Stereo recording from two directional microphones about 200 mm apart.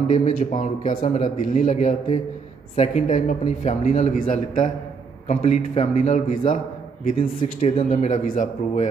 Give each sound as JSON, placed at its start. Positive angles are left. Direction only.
{"t": 0.2, "sound": "a man's voice", "side_deg": 40}